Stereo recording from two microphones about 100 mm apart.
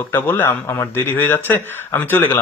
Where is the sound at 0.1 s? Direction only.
20° left (ahead or behind).